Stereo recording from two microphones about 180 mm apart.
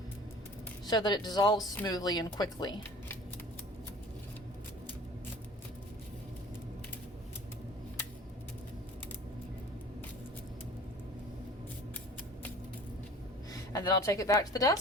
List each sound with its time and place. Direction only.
0.9 s speech: 25° left (ahead or behind)
13.5 s a woman's voice: 20° left (ahead or behind)